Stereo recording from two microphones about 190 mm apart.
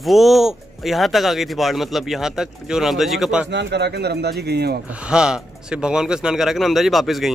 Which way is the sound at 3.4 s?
65° right (ahead or behind).